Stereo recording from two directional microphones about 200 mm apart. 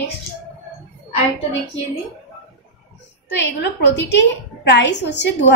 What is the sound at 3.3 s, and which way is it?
A woman's voice, 60° left (ahead or behind).